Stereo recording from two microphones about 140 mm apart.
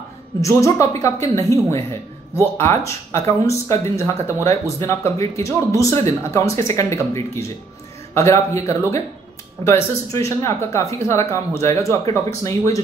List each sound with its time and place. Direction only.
0.4 s speech: 20° left (ahead or behind)